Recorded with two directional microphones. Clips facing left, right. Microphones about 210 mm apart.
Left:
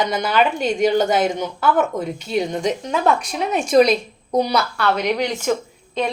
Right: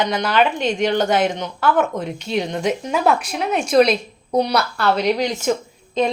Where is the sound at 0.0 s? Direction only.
5° left (ahead or behind).